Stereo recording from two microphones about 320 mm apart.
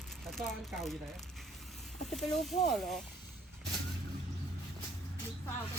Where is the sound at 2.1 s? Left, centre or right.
Centre.